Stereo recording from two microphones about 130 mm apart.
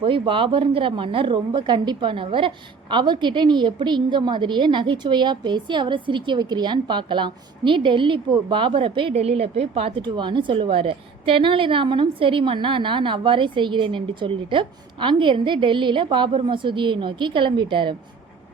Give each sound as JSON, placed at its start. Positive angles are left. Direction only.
{"t": 0.0, "sound": "a woman's voice", "side_deg": -40}